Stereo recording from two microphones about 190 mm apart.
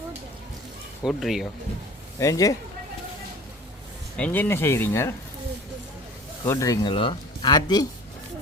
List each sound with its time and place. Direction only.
1.0 s speech: centre (ahead or behind)
2.1 s speech: 15° left (ahead or behind)
4.2 s speech: 10° left (ahead or behind)
6.4 s speech: 15° left (ahead or behind)